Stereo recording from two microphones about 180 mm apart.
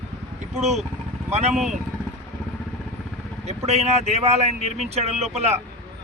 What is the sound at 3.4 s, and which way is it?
Speech, 35° right (ahead or behind).